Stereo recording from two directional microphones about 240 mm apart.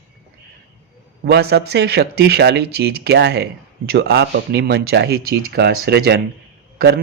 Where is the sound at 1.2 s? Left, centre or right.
Right.